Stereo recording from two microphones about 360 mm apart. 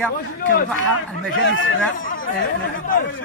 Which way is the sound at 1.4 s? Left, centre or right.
Left.